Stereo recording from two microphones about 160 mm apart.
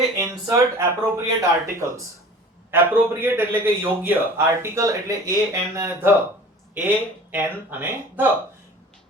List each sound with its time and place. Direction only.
0.2 s speech: 20° right (ahead or behind)